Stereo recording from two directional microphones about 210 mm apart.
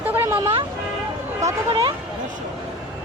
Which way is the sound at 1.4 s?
20° right (ahead or behind).